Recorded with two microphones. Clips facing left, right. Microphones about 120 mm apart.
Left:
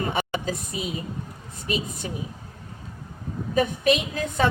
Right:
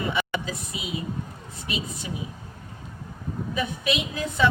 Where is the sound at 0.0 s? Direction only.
45° left (ahead or behind).